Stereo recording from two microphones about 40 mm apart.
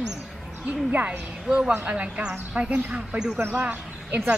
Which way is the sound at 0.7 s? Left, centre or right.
Right.